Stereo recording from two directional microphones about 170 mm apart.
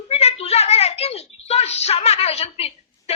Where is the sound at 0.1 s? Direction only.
40° left (ahead or behind).